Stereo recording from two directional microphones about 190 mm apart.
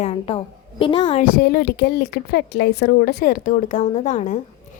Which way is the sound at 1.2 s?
50° left (ahead or behind).